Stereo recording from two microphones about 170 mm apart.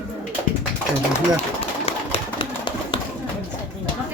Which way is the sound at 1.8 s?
35° left (ahead or behind).